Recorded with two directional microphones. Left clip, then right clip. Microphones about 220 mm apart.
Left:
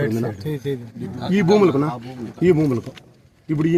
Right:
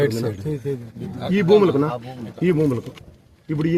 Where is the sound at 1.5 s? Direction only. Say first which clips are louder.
Right 2 dB; 40° left (ahead or behind).